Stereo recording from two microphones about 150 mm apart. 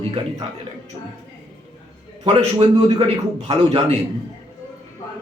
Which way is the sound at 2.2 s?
45° right (ahead or behind).